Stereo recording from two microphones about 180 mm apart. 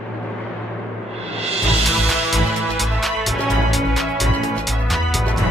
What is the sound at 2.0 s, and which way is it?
Music, centre (ahead or behind).